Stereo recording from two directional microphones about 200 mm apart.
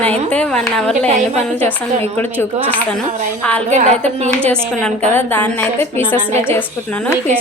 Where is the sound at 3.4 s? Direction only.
5° left (ahead or behind).